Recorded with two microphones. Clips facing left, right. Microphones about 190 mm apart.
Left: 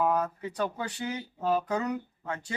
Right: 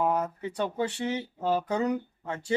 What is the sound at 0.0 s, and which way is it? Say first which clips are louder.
Speech: even; 25° right (ahead or behind).